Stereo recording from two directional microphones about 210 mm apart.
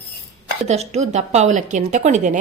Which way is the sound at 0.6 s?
30° right (ahead or behind).